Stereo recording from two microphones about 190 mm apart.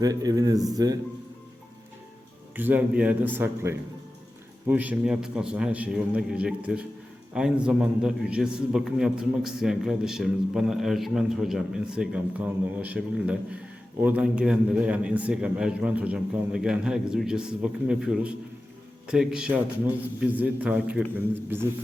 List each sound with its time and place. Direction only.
0.0 s speech: 20° right (ahead or behind)
2.6 s a man's voice: 10° right (ahead or behind)